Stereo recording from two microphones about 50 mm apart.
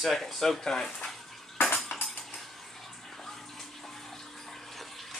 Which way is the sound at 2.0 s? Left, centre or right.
Left.